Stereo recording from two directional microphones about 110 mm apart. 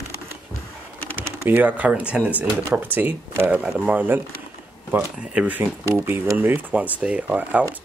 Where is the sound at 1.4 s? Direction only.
15° right (ahead or behind).